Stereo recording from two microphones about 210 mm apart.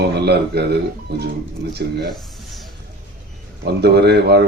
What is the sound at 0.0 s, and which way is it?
Speech, 50° right (ahead or behind).